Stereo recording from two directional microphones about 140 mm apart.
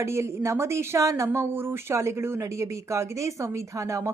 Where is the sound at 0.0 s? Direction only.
20° right (ahead or behind).